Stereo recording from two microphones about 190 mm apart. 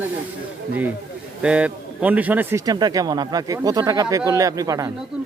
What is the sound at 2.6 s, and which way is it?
Speech, 20° right (ahead or behind).